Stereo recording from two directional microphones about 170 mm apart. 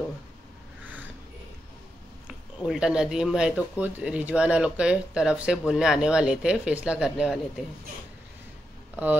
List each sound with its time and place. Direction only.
2.2 s speech: centre (ahead or behind)
8.9 s speech: 10° right (ahead or behind)